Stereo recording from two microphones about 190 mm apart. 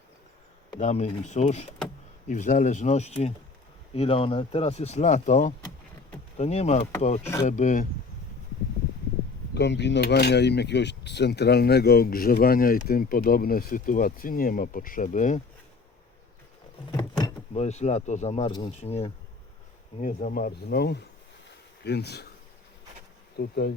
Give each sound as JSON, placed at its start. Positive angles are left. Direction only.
{"t": 0.8, "sound": "speech", "side_deg": 35}
{"t": 9.6, "sound": "speech", "side_deg": 65}
{"t": 16.9, "sound": "a sound", "side_deg": 20}
{"t": 17.5, "sound": "speech", "side_deg": 35}
{"t": 20.0, "sound": "speech", "side_deg": 45}
{"t": 23.4, "sound": "speech", "side_deg": 55}